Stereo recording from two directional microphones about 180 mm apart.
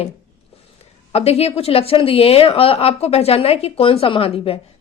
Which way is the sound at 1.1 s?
35° left (ahead or behind).